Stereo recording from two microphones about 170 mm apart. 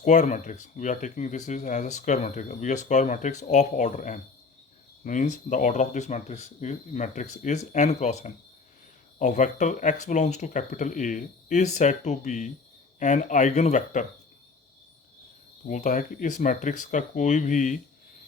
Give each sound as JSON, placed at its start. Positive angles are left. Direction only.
{"t": 0.0, "sound": "speech", "side_deg": 45}
{"t": 15.6, "sound": "speech", "side_deg": 50}